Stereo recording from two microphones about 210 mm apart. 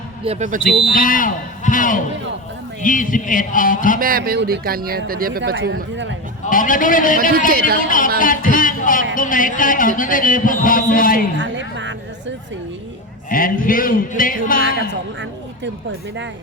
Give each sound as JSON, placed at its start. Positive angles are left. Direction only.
{"t": 0.3, "sound": "speech", "side_deg": -35}
{"t": 0.9, "sound": "a man's voice", "side_deg": 40}
{"t": 4.0, "sound": "speech", "side_deg": -45}
{"t": 5.5, "sound": "speech", "side_deg": -55}
{"t": 6.5, "sound": "a man's voice", "side_deg": 40}
{"t": 11.3, "sound": "a sound", "side_deg": -60}
{"t": 13.3, "sound": "a man's voice", "side_deg": 40}